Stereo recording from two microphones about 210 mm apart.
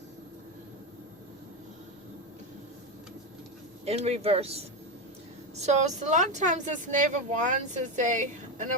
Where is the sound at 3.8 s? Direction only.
30° right (ahead or behind).